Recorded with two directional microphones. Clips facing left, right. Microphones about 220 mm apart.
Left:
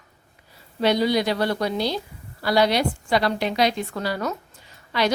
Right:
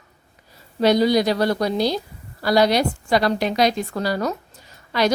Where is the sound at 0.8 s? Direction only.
40° right (ahead or behind).